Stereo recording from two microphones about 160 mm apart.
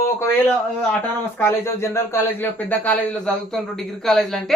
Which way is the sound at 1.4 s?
15° left (ahead or behind).